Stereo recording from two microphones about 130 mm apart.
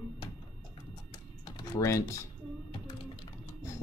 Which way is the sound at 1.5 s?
25° left (ahead or behind).